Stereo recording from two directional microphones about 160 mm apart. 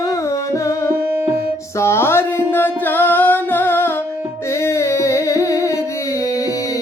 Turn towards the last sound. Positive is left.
turn(degrees=20)  # may be behind; listen again after turning